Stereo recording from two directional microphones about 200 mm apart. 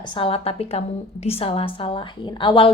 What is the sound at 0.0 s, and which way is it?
A woman's voice, 25° left (ahead or behind).